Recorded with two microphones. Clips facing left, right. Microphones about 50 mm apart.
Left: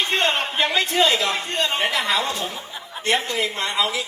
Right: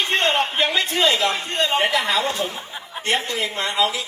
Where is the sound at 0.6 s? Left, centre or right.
Left.